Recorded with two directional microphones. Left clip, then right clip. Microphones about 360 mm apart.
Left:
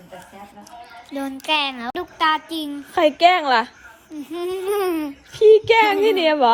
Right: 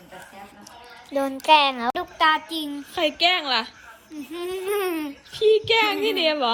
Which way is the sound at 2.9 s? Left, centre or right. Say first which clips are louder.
Left 6 dB; centre.